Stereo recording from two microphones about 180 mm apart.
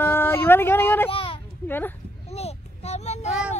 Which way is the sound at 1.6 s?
10° left (ahead or behind).